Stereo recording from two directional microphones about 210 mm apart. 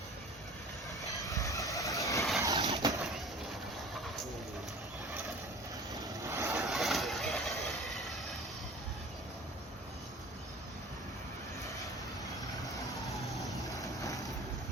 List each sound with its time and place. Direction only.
1.3 s vehicle: 15° left (ahead or behind)
2.4 s vehicle: 15° right (ahead or behind)
2.7 s a sound: 15° right (ahead or behind)
5.9 s vehicle: 15° right (ahead or behind)
6.6 s vehicle: centre (ahead or behind)
13.1 s vehicle: centre (ahead or behind)
13.7 s vehicle: 15° left (ahead or behind)